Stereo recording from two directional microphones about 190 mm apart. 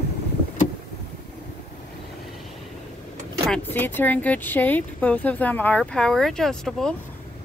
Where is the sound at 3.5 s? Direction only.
10° left (ahead or behind).